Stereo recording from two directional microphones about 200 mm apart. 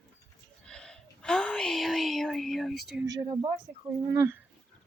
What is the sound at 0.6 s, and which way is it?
Speech, 5° left (ahead or behind).